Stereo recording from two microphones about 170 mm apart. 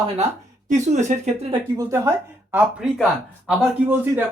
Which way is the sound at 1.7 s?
15° right (ahead or behind).